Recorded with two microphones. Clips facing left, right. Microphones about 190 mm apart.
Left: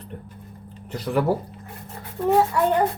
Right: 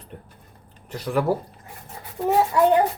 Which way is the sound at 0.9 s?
5° right (ahead or behind).